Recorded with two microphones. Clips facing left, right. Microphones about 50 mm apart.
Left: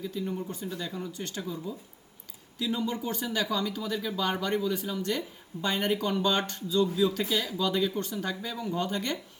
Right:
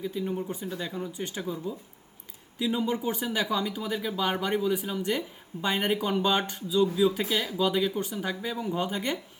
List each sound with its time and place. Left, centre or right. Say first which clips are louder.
0.0 s speech: right 2 dB; centre